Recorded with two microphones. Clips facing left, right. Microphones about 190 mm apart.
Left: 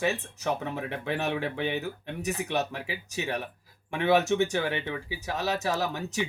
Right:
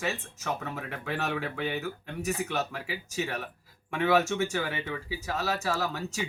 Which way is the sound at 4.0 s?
15° left (ahead or behind).